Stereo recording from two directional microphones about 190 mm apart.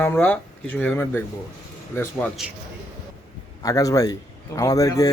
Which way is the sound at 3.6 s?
20° left (ahead or behind).